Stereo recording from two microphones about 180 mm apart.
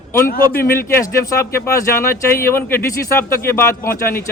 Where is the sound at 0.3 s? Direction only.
55° left (ahead or behind).